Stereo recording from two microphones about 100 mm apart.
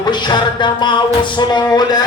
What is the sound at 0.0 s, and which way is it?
Music, 45° left (ahead or behind).